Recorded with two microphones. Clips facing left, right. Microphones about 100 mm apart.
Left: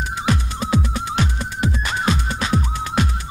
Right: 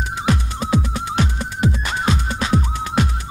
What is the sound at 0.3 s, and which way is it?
Music, 15° right (ahead or behind).